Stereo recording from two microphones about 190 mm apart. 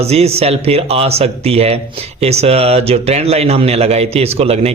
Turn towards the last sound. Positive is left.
turn(degrees=-35)  # may be behind; listen again after turning